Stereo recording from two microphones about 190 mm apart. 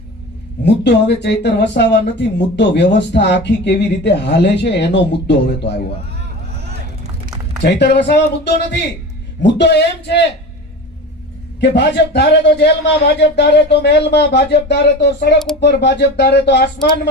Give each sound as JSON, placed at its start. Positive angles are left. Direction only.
{"t": 0.6, "sound": "speech", "side_deg": 65}
{"t": 7.6, "sound": "speech", "side_deg": 65}
{"t": 11.6, "sound": "speech", "side_deg": 60}